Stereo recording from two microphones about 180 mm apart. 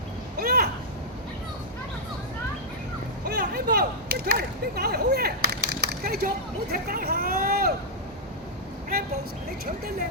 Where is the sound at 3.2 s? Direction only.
60° right (ahead or behind).